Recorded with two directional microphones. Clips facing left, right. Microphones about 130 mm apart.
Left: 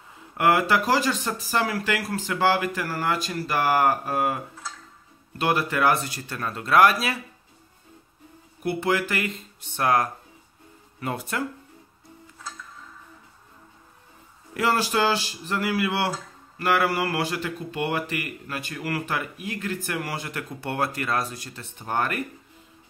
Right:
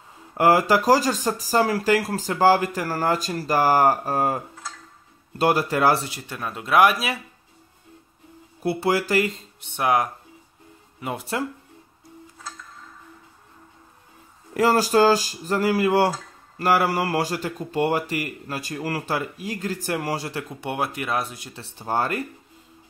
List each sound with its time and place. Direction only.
0.3 s speech: 35° right (ahead or behind)
5.4 s speech: 35° right (ahead or behind); by 7.2 s 15° right (ahead or behind)
8.6 s speech: 35° right (ahead or behind)
9.8 s speech: 15° right (ahead or behind)
11.1 s speech: 25° right (ahead or behind)
14.5 s speech: 40° right (ahead or behind)
20.4 s speech: 15° right (ahead or behind)
21.5 s speech: 30° right (ahead or behind)